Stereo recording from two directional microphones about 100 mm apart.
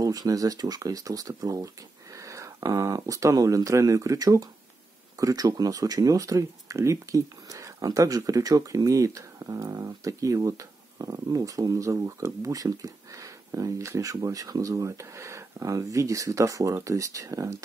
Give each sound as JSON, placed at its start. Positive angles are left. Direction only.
{"t": 0.0, "sound": "speech", "side_deg": -35}